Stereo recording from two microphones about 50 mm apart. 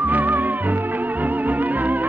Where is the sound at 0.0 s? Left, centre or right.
Right.